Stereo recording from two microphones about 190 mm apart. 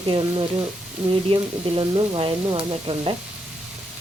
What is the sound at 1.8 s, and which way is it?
Speech, 25° right (ahead or behind).